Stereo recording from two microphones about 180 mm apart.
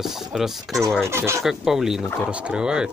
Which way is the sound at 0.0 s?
Centre (ahead or behind).